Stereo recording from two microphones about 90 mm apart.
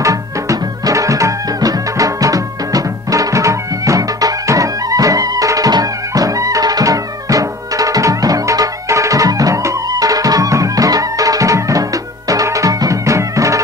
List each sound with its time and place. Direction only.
0.0 s music: 40° right (ahead or behind)